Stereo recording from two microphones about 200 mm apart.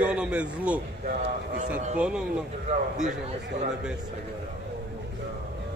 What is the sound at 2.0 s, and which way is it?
Speech, 5° right (ahead or behind).